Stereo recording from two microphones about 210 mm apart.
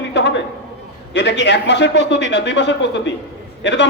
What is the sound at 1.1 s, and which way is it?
A man's voice, 55° left (ahead or behind).